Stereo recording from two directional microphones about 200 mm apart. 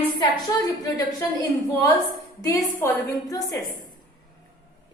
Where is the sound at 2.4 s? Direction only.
15° left (ahead or behind).